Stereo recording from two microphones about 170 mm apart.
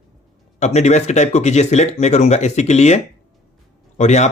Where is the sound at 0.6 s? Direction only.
40° left (ahead or behind).